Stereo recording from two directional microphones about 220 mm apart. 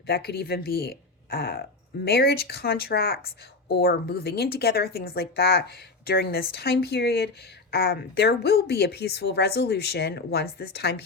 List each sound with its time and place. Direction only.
0.1 s a woman's voice: 45° left (ahead or behind)